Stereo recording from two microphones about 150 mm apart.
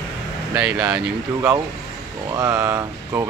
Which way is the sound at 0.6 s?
10° right (ahead or behind).